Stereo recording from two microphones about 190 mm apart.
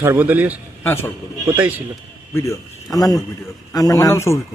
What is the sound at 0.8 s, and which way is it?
Speech, 10° left (ahead or behind).